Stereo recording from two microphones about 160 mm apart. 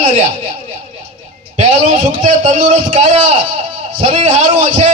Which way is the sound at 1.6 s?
50° right (ahead or behind).